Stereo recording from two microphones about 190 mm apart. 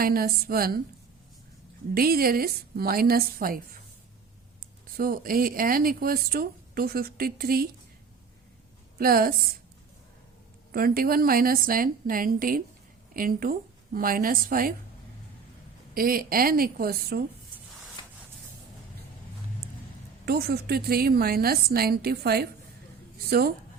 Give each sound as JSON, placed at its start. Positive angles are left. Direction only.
{"t": 0.0, "sound": "speech", "side_deg": -50}
{"t": 2.0, "sound": "speech", "side_deg": -50}
{"t": 4.9, "sound": "speech", "side_deg": -50}
{"t": 9.0, "sound": "speech", "side_deg": -50}
{"t": 10.7, "sound": "speech", "side_deg": -50}
{"t": 16.0, "sound": "speech", "side_deg": -50}
{"t": 20.2, "sound": "a woman's voice", "side_deg": -55}